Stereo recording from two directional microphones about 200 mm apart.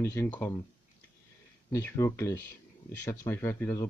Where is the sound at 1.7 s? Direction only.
15° left (ahead or behind).